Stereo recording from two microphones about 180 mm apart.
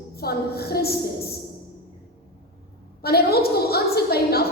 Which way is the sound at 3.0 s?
60° left (ahead or behind).